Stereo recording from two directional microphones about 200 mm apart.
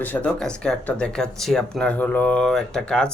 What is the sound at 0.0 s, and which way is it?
A man's voice, 10° left (ahead or behind).